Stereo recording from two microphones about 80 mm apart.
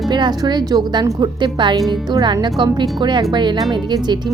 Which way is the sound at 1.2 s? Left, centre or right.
Right.